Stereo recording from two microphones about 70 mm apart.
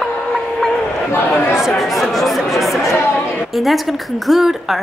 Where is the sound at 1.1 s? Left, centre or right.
Left.